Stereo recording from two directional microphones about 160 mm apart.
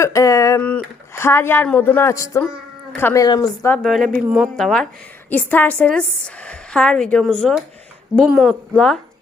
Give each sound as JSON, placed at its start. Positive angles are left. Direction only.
{"t": 0.0, "sound": "speech", "side_deg": 20}
{"t": 3.7, "sound": "a woman's voice", "side_deg": 0}